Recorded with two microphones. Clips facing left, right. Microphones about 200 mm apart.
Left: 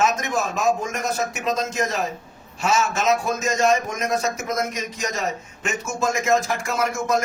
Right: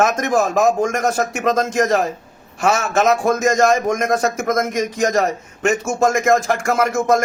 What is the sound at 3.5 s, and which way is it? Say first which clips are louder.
A man's voice: right 5 dB; 50° right (ahead or behind).